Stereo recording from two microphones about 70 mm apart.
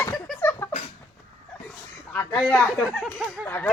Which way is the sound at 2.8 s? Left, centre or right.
Centre.